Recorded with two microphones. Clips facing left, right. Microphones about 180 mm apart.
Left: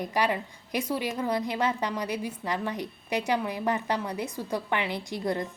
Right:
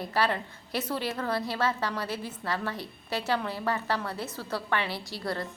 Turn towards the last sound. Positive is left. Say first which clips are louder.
# left 4 dB
turn(degrees=20)  # may be behind; listen again after turning